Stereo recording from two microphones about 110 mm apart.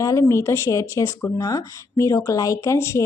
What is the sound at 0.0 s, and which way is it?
Speech, 30° left (ahead or behind).